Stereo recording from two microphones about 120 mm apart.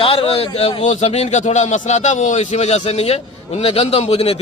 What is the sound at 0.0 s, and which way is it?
A man's voice, 50° left (ahead or behind).